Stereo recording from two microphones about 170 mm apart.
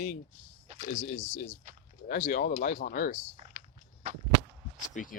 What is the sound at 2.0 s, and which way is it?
Speech, 55° left (ahead or behind).